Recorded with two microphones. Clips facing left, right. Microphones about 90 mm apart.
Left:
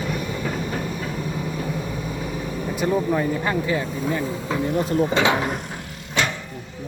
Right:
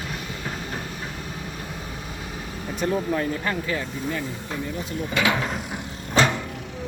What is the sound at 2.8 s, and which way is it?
Speech, 10° left (ahead or behind).